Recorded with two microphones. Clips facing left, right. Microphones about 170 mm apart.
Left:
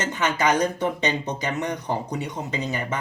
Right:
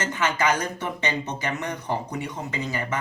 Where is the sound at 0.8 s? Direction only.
15° left (ahead or behind).